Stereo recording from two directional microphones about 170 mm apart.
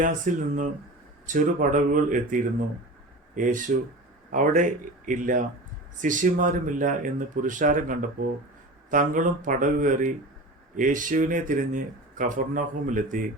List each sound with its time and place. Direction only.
0.0 s speech: 50° right (ahead or behind)